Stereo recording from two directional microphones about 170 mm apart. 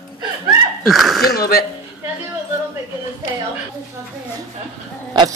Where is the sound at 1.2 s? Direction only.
65° left (ahead or behind).